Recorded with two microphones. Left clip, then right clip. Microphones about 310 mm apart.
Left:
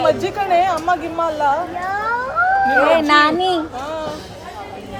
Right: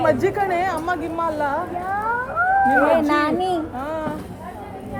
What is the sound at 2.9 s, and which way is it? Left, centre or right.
Speech, left.